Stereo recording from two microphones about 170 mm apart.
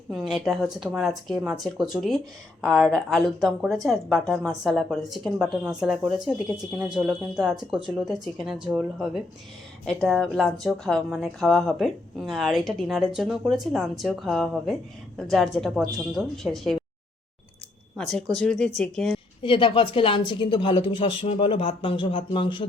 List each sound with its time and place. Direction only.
0.1 s speech: centre (ahead or behind)
17.9 s speech: centre (ahead or behind)
19.4 s speech: 30° left (ahead or behind)